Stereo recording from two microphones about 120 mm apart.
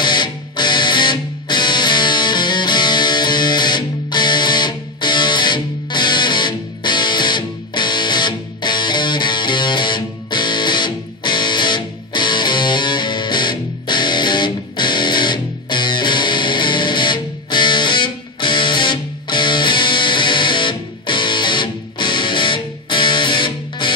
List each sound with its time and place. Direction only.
0.0 s music: 40° left (ahead or behind)